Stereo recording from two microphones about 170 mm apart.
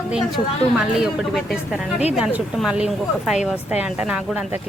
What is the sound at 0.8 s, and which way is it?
Speech, 5° right (ahead or behind).